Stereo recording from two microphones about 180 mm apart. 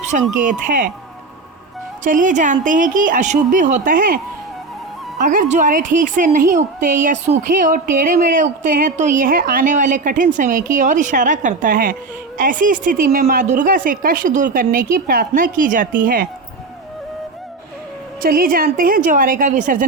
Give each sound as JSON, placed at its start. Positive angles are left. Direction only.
{"t": 0.0, "sound": "speech", "side_deg": -40}
{"t": 2.0, "sound": "speech", "side_deg": -45}
{"t": 5.2, "sound": "speech", "side_deg": -45}
{"t": 18.2, "sound": "speech", "side_deg": -50}